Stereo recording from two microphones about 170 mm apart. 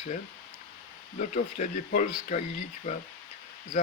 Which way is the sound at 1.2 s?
45° left (ahead or behind).